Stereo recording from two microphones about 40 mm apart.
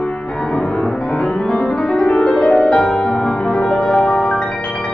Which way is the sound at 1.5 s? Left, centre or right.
Centre.